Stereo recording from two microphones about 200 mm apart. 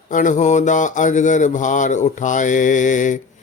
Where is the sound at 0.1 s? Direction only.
40° left (ahead or behind).